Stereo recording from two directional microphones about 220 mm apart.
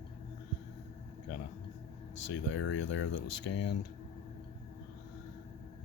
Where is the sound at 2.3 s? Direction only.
55° left (ahead or behind).